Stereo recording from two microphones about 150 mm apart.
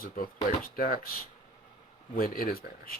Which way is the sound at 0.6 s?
80° left.